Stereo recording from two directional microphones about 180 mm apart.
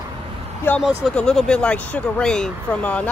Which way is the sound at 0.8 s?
Centre (ahead or behind).